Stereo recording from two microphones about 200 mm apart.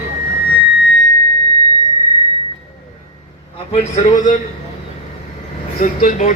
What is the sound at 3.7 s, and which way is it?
Speech, 35° left (ahead or behind).